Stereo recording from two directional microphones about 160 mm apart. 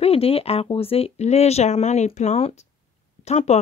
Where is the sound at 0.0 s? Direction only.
40° left (ahead or behind).